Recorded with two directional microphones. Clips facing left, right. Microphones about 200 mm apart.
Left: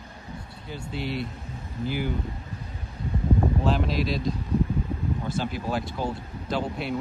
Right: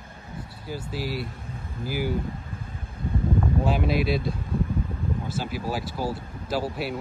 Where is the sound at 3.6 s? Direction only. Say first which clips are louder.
Right 1 dB; 10° right (ahead or behind).